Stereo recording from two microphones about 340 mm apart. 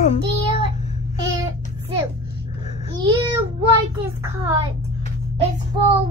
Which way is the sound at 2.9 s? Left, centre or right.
Centre.